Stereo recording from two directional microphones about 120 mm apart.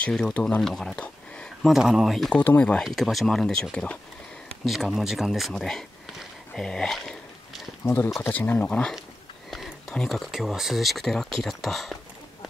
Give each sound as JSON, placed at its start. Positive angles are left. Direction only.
{"t": 0.0, "sound": "speech", "side_deg": 5}
{"t": 2.3, "sound": "speech", "side_deg": 15}
{"t": 2.8, "sound": "speech", "side_deg": 0}
{"t": 4.6, "sound": "speech", "side_deg": 0}
{"t": 7.8, "sound": "speech", "side_deg": 20}